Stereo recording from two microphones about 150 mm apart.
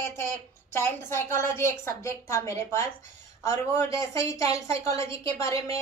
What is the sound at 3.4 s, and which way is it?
A woman's voice, 20° left (ahead or behind).